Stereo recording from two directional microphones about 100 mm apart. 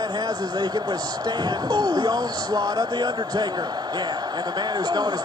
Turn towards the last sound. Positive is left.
turn(degrees=-40)  # may be behind; listen again after turning